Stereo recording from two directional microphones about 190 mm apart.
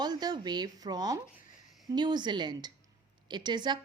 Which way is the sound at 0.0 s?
20° right (ahead or behind).